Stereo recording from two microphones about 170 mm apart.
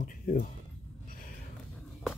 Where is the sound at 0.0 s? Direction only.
50° left (ahead or behind).